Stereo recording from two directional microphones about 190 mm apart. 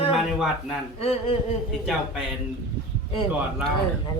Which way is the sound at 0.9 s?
30° left (ahead or behind).